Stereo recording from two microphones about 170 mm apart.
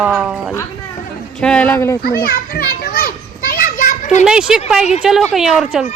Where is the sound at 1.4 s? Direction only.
5° left (ahead or behind).